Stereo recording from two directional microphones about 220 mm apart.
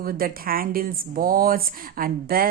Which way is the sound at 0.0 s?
40° right (ahead or behind).